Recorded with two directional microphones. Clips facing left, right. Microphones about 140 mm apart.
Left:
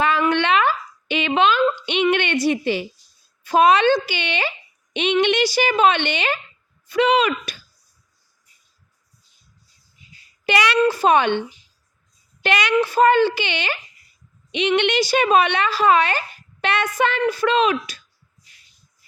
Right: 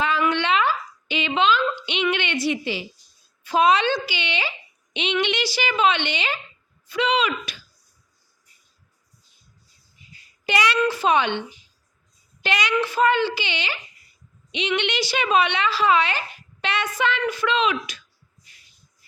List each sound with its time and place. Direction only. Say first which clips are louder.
0.0 s a sound: left 3 dB; 55° left (ahead or behind)
3.4 s speech: left 4 dB; 50° left (ahead or behind)
10.4 s child singing: left 2 dB; 70° left (ahead or behind)
10.8 s speech: left 4 dB; 45° left (ahead or behind)
12.4 s a woman's voice: left 4 dB; 60° left (ahead or behind)
12.8 s speech: left 6 dB; 45° left (ahead or behind)
14.8 s speech: left 6 dB; 50° left (ahead or behind)